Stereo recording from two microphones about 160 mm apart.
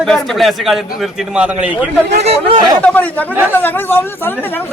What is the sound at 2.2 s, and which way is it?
Speech, 40° right (ahead or behind).